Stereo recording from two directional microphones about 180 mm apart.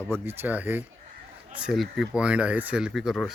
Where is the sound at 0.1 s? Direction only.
10° right (ahead or behind).